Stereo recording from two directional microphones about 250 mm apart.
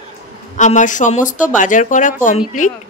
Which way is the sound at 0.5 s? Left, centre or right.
Left.